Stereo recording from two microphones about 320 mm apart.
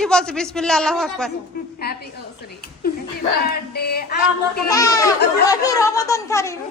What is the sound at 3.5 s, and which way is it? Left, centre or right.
Speech, left.